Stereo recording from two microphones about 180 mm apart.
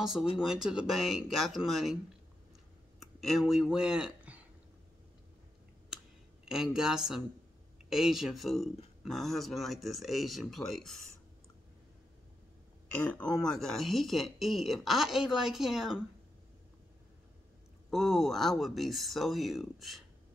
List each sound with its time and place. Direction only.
0.0 s speech: centre (ahead or behind)
3.0 s speech: centre (ahead or behind)
6.4 s speech: 5° right (ahead or behind)
13.1 s speech: 5° left (ahead or behind)
17.8 s speech: centre (ahead or behind)